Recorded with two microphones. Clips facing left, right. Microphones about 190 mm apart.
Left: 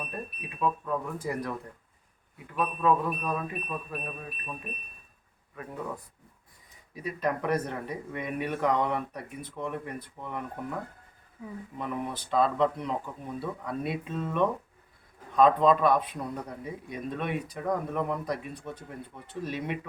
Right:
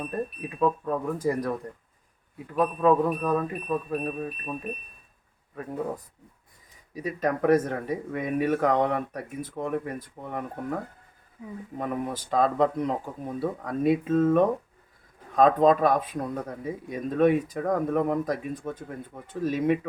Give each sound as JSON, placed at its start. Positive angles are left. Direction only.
{"t": 0.6, "sound": "speech", "side_deg": -40}
{"t": 2.6, "sound": "speech", "side_deg": -50}
{"t": 6.9, "sound": "speech", "side_deg": -45}
{"t": 11.8, "sound": "speech", "side_deg": -45}